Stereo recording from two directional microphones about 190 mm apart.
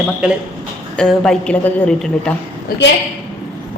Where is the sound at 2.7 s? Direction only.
50° left (ahead or behind).